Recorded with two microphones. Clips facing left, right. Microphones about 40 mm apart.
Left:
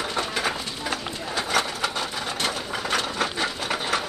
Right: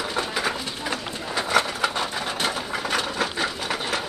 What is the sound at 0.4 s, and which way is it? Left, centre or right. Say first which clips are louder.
Bird: even; centre.